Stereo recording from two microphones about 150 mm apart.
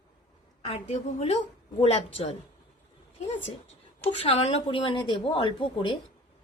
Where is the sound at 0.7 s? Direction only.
45° left (ahead or behind).